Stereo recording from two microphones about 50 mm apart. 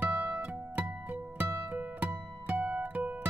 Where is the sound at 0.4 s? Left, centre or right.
Right.